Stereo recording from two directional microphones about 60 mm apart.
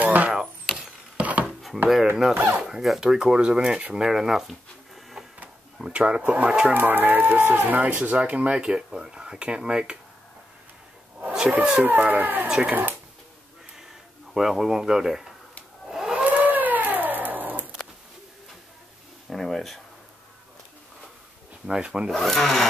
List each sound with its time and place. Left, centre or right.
0.0 s a sound: right
2.7 s speech: centre
5.8 s speech: centre
6.7 s speech: right; by 9.9 s centre
11.1 s wild animals: right
11.8 s speech: right
12.4 s speech: centre
14.3 s speech: centre
15.9 s civil defense siren: centre
16.3 s a sound: right
19.2 s a sound: centre
21.6 s speech: centre
22.1 s speech: centre